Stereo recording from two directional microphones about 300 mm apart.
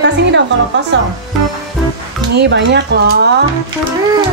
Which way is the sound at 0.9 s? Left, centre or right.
Right.